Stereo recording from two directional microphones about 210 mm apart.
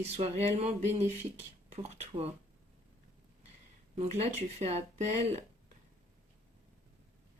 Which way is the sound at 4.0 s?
30° right (ahead or behind).